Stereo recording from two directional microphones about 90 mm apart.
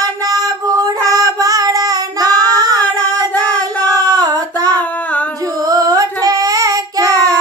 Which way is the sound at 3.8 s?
45° right (ahead or behind).